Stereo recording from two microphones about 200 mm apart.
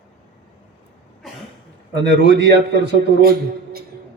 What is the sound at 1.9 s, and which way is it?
A man's voice, 60° right (ahead or behind).